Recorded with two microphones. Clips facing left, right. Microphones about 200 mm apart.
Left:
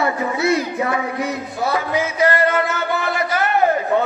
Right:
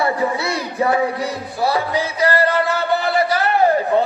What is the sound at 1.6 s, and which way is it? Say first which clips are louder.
Speech: right 1 dB; 35° right (ahead or behind).